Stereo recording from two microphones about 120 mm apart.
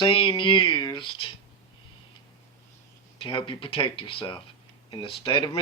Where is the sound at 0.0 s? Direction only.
45° left (ahead or behind).